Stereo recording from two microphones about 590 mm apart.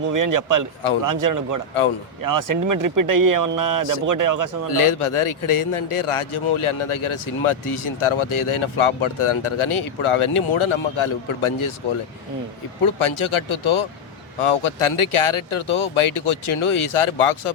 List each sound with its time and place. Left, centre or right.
0.1 s speech: right
4.7 s a man's voice: left
12.8 s a man's voice: left